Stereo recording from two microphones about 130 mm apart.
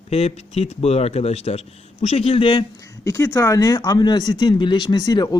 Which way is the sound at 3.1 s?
20° left (ahead or behind).